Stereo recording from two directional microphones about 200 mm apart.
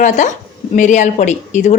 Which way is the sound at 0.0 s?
35° left (ahead or behind).